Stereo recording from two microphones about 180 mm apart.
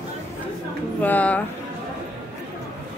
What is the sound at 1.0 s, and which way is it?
Speech, 10° left (ahead or behind).